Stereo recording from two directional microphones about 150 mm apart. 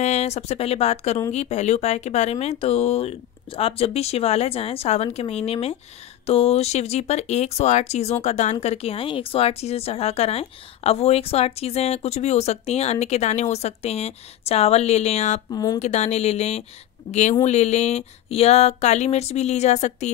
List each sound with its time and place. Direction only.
0.0 s speech: 45° left (ahead or behind)
15.5 s speech: 25° left (ahead or behind)
15.8 s speech: 50° left (ahead or behind)